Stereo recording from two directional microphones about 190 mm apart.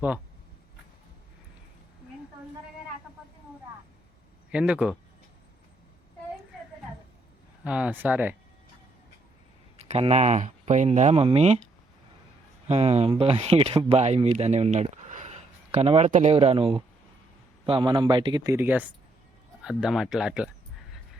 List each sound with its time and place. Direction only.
4.5 s speech: 5° right (ahead or behind)
7.6 s speech: 5° right (ahead or behind)
9.7 s speech: 35° right (ahead or behind)
12.6 s speech: 35° right (ahead or behind); by 20.5 s 5° right (ahead or behind)